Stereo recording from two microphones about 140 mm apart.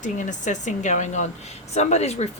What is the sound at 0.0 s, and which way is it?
Speech, 60° left (ahead or behind).